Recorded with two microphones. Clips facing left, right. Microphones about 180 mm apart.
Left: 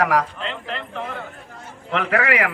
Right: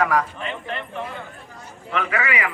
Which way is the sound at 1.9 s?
65° left (ahead or behind).